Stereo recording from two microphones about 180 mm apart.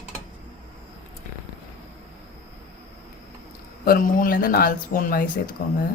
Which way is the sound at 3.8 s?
55° left (ahead or behind).